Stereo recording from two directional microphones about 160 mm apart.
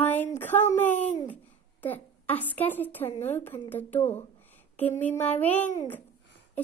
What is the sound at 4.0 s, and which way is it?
Speech, 40° left (ahead or behind).